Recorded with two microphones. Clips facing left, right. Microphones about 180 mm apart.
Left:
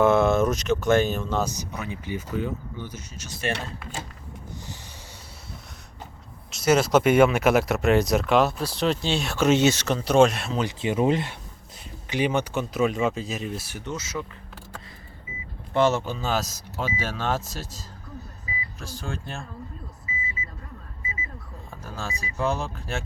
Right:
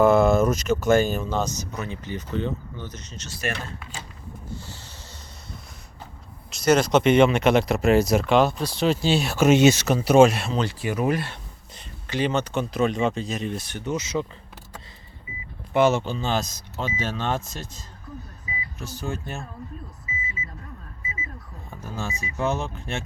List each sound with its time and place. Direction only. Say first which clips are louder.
0.0 s speech: right 2 dB; centre (ahead or behind)
1.5 s speech: right 1 dB; 10° left (ahead or behind)
4.4 s a sound: right 2 dB; 15° left (ahead or behind)
6.5 s speech: right 1 dB; 5° left (ahead or behind)
10.6 s speech: left 3 dB; 20° left (ahead or behind)
13.9 s speech: right 6 dB; 15° right (ahead or behind)
15.7 s speech: right 2 dB; 10° right (ahead or behind)
16.0 s speech: right 1 dB; 5° left (ahead or behind)
21.8 s speech: right 2 dB; centre (ahead or behind)